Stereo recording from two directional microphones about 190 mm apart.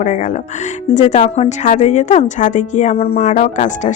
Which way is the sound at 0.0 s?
40° left (ahead or behind).